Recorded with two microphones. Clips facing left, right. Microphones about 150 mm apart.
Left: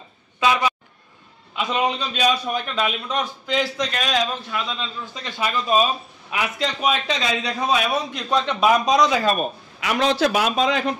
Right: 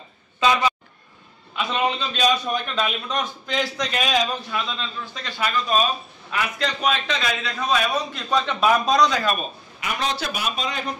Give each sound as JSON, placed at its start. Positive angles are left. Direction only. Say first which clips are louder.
{"t": 0.4, "sound": "a sound", "louder": "even", "side_deg": 10}
{"t": 1.7, "sound": "a man's voice", "louder": "left 1 dB", "side_deg": 10}
{"t": 3.9, "sound": "a man's voice", "louder": "even", "side_deg": -5}
{"t": 8.5, "sound": "a man's voice", "louder": "left 1 dB", "side_deg": 5}
{"t": 9.1, "sound": "a man's voice", "louder": "left 3 dB", "side_deg": 25}
{"t": 9.4, "sound": "a man's voice", "louder": "left 6 dB", "side_deg": 90}